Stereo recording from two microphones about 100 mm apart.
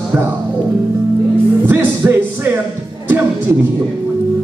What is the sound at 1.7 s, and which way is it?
Music, 20° right (ahead or behind).